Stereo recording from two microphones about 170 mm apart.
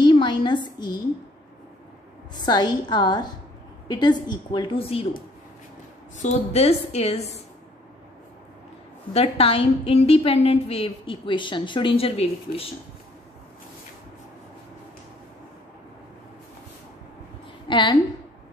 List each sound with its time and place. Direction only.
0.0 s a sound: 25° left (ahead or behind)
2.4 s a woman's voice: 25° left (ahead or behind)
6.1 s a woman's voice: 40° left (ahead or behind)
9.1 s a woman's voice: 35° left (ahead or behind)
17.6 s a woman's voice: 30° left (ahead or behind)